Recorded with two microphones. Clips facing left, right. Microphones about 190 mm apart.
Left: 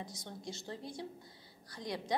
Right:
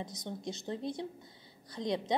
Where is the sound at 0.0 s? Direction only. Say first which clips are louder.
Right 5 dB; 20° right (ahead or behind).